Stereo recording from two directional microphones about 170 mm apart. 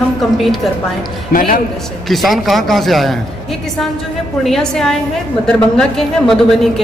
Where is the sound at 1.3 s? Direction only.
50° left (ahead or behind).